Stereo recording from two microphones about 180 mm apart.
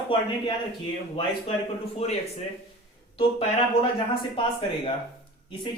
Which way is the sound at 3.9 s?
30° left (ahead or behind).